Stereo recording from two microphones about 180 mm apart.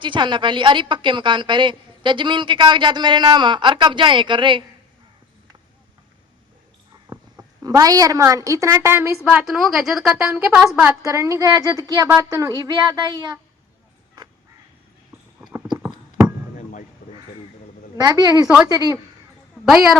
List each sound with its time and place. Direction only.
0.0 s a woman's voice: 25° right (ahead or behind)
7.1 s a woman's voice: 20° right (ahead or behind)
9.2 s a woman's voice: 5° right (ahead or behind)
11.0 s a woman's voice: 15° right (ahead or behind)
15.4 s a sound: 5° right (ahead or behind)
15.8 s a sound: 15° right (ahead or behind)
17.9 s a woman's voice: 20° right (ahead or behind)
18.4 s a woman's voice: 5° right (ahead or behind)
18.7 s a woman's voice: 20° right (ahead or behind)
19.6 s a woman's voice: centre (ahead or behind)